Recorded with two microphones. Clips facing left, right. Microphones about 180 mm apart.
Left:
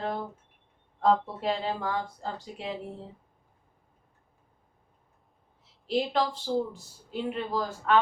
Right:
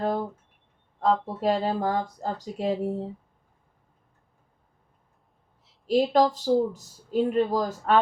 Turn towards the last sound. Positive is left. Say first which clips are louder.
# right 3 dB
turn(degrees=-40)  # may be behind; listen again after turning